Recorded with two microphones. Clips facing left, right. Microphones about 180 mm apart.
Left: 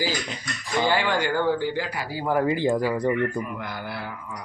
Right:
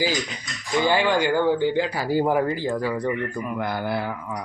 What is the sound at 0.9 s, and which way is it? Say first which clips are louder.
Speech: right 4 dB; 20° right (ahead or behind).